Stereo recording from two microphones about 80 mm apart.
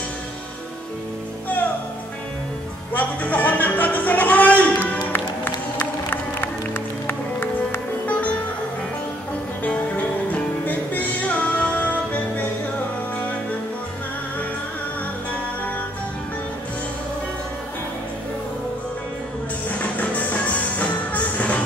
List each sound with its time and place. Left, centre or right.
2.9 s music: centre
7.1 s music: left
9.6 s music: centre
19.8 s music: centre